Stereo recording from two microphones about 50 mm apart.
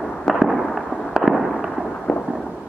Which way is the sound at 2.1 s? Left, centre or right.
Left.